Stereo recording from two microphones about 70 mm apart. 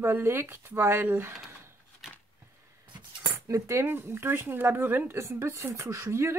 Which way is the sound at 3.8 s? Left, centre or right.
Right.